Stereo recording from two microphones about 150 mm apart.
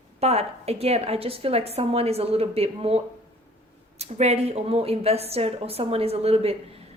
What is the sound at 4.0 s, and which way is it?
A woman's voice, 45° right (ahead or behind).